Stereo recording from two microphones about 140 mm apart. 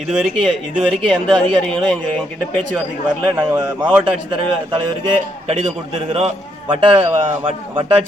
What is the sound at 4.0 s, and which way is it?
A man's voice, 35° right (ahead or behind).